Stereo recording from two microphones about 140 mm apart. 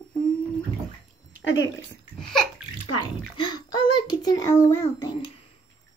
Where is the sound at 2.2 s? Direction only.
Centre (ahead or behind).